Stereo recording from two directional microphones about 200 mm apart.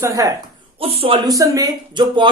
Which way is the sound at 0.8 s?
30° right (ahead or behind).